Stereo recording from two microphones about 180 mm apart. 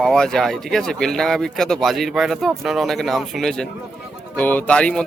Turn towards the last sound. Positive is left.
turn(degrees=5)  # may be behind; listen again after turning